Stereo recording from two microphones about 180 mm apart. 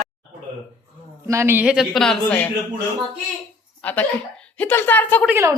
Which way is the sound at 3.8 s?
5° left (ahead or behind).